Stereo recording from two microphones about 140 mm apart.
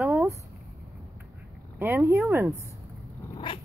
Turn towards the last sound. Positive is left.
turn(degrees=35)  # may be behind; listen again after turning